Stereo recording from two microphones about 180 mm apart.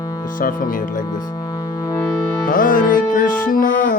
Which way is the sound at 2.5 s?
50° left (ahead or behind).